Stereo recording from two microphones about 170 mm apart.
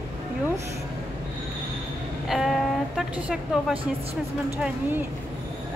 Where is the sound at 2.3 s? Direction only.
Centre (ahead or behind).